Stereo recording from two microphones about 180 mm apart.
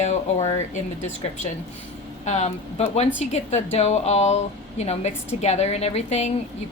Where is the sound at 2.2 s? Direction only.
40° left (ahead or behind).